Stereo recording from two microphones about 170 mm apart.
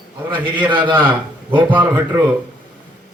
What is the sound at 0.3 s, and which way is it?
Speech, 25° right (ahead or behind).